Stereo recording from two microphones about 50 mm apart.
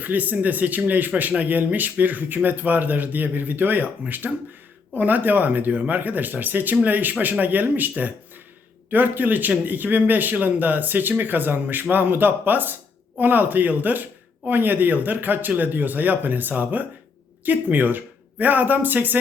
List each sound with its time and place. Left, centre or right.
0.0 s speech: right